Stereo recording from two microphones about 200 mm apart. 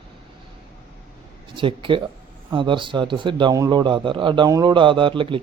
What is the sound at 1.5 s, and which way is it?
A man's voice, 25° right (ahead or behind).